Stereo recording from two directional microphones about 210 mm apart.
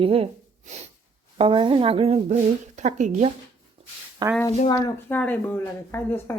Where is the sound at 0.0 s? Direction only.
25° right (ahead or behind).